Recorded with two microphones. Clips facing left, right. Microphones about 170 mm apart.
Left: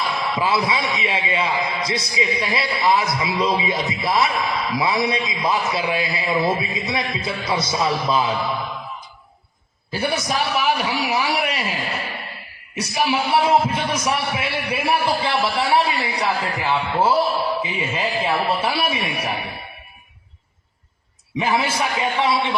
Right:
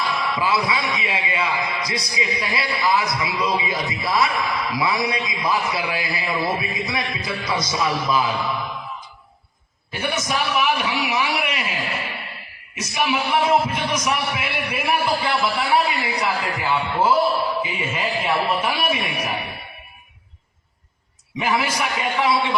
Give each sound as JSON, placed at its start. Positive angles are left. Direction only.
{"t": 0.0, "sound": "a man's voice", "side_deg": 25}
{"t": 9.9, "sound": "a man's voice", "side_deg": 35}
{"t": 21.3, "sound": "a man's voice", "side_deg": 30}